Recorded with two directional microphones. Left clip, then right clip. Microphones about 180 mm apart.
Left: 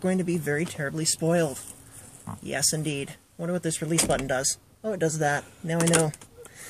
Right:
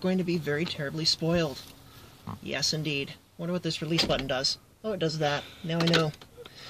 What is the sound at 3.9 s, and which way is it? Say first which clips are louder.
Speech: left 1 dB; 10° left (ahead or behind).